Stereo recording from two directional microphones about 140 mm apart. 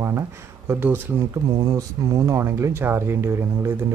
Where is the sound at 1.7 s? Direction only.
25° right (ahead or behind).